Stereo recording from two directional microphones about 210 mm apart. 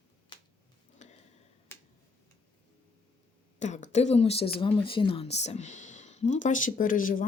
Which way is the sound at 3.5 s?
35° left (ahead or behind).